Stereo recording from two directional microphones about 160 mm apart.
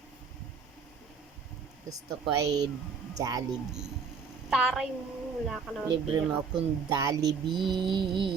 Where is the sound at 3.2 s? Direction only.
20° right (ahead or behind).